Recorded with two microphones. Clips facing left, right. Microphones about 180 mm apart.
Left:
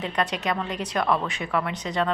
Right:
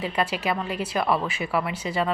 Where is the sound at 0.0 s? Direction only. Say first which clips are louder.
Right 1 dB; 5° right (ahead or behind).